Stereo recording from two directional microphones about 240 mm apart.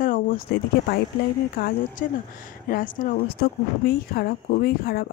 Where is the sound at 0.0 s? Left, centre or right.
Left.